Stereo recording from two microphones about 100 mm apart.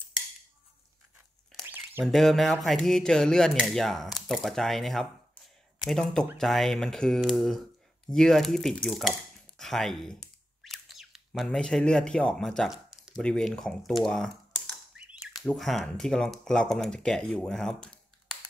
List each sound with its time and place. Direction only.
1.6 s a sound: 20° right (ahead or behind)
2.0 s speech: centre (ahead or behind)
10.6 s bird: centre (ahead or behind)
11.4 s speech: 5° left (ahead or behind)
15.0 s bird: 10° right (ahead or behind)
15.4 s speech: centre (ahead or behind)